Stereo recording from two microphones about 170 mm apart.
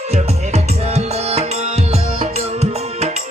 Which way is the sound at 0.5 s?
40° right (ahead or behind).